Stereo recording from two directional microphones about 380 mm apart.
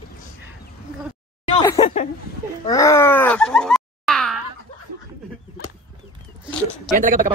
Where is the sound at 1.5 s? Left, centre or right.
Centre.